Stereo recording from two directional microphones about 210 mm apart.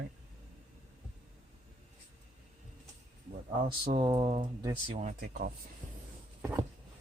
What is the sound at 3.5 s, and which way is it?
Speech, 25° right (ahead or behind).